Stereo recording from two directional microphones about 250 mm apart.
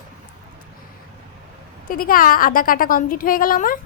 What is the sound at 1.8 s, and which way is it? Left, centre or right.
Speech, left.